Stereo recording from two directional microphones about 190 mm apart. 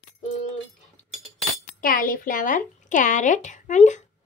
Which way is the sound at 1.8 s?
50° left (ahead or behind).